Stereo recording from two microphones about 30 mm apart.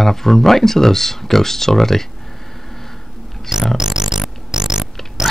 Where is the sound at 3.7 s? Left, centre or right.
Right.